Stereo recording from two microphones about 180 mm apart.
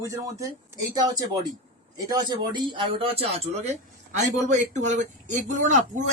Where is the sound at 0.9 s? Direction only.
20° right (ahead or behind).